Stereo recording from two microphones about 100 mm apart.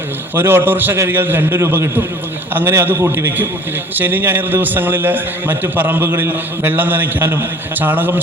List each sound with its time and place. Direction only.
0.3 s a man's voice: 20° right (ahead or behind)